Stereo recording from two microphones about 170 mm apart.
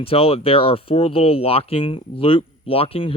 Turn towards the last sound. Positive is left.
turn(degrees=35)  # may be behind; listen again after turning